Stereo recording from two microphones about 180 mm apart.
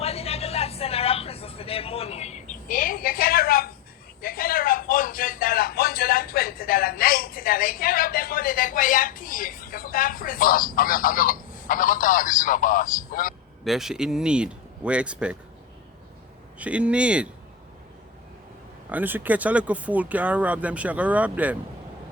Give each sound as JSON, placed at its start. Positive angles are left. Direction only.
{"t": 0.0, "sound": "vehicle", "side_deg": 35}
{"t": 4.2, "sound": "a sound", "side_deg": 55}
{"t": 13.7, "sound": "speech", "side_deg": 0}
{"t": 16.6, "sound": "speech", "side_deg": -5}
{"t": 18.9, "sound": "speech", "side_deg": -10}